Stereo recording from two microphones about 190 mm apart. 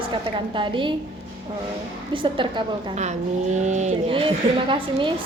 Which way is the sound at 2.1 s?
25° right (ahead or behind).